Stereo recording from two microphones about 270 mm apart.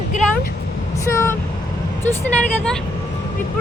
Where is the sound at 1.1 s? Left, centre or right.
Centre.